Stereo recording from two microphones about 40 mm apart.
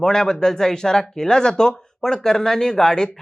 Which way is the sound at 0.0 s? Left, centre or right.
Centre.